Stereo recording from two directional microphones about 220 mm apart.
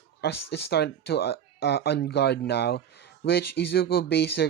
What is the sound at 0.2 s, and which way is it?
Speech, 50° left (ahead or behind).